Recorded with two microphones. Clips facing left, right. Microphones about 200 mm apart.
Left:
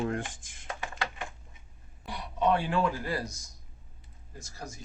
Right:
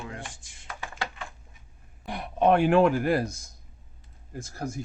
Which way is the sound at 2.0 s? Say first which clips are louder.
Right 5 dB; 55° right (ahead or behind).